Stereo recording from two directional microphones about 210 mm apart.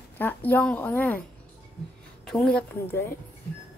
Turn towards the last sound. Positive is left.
turn(degrees=10)  # may be behind; listen again after turning